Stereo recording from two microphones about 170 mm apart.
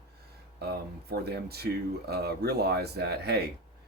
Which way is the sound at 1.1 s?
70° right (ahead or behind).